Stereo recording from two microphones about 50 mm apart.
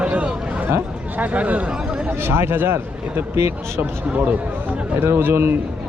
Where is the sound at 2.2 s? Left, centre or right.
Right.